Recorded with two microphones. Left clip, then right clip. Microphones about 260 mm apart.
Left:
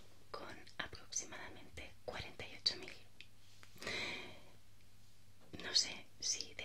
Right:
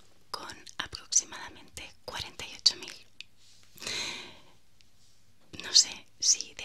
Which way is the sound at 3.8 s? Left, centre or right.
Centre.